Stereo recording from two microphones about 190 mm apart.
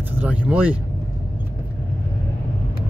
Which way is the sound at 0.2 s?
10° right (ahead or behind).